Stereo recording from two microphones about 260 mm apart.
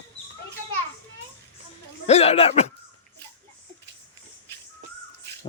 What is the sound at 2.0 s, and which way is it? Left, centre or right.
Speech, left.